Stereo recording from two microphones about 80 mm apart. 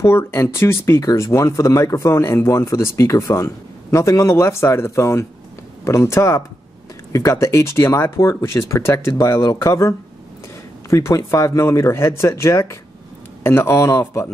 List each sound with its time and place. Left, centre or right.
0.0 s speech: left
9.4 s speech: left